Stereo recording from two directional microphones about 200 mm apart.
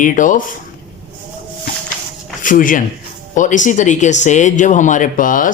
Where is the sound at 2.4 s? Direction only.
40° left (ahead or behind).